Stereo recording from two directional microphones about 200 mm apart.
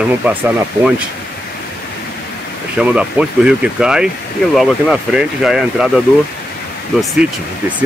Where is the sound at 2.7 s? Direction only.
5° right (ahead or behind).